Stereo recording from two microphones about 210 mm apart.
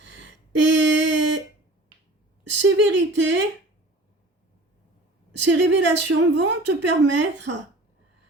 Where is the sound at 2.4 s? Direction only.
60° right (ahead or behind).